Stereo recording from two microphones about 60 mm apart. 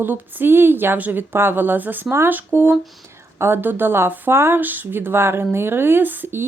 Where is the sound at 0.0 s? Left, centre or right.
Right.